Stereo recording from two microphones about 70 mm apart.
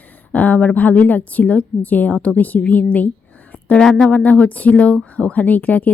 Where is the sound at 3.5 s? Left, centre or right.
Left.